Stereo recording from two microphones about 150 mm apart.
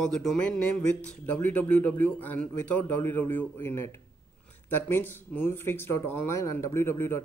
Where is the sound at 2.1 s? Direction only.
10° left (ahead or behind).